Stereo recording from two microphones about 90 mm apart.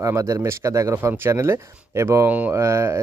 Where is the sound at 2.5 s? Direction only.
30° right (ahead or behind).